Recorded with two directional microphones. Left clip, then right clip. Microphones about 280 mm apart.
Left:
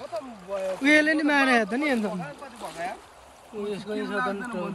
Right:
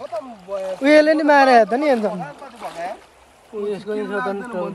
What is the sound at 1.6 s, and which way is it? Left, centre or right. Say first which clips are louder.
Speech: right 9 dB; right.